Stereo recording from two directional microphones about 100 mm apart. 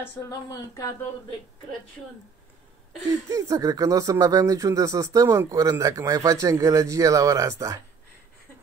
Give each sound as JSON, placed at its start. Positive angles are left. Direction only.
{"t": 0.5, "sound": "speech", "side_deg": 35}
{"t": 3.3, "sound": "speech", "side_deg": -35}